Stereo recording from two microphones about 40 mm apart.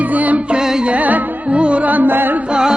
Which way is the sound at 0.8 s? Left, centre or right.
Right.